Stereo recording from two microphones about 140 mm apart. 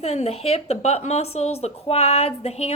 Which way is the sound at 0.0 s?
50° left (ahead or behind).